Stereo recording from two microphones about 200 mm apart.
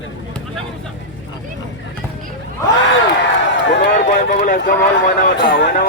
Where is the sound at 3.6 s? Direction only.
60° left (ahead or behind).